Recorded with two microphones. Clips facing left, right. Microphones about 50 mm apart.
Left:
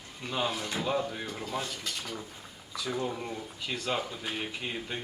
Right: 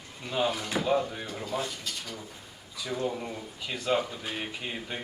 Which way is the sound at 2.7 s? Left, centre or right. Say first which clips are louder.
Right 1 dB; centre.